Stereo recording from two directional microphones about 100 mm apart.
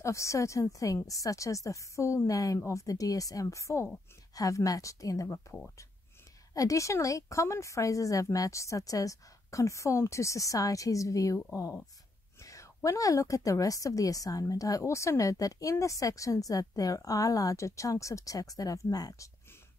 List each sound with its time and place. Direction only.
0.0 s a woman's voice: 30° left (ahead or behind)